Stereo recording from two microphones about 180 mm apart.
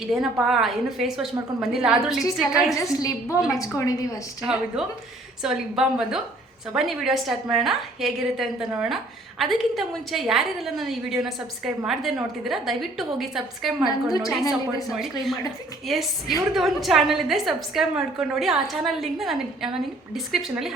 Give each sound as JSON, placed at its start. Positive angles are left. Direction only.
{"t": 0.1, "sound": "a woman's voice", "side_deg": 0}
{"t": 2.7, "sound": "a woman's voice", "side_deg": 20}
{"t": 4.8, "sound": "a woman's voice", "side_deg": -5}
{"t": 15.9, "sound": "a woman's voice", "side_deg": 0}